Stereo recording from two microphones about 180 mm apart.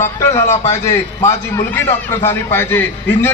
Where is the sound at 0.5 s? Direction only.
40° left (ahead or behind).